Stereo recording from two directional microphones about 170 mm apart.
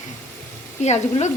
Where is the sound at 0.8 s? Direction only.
40° left (ahead or behind).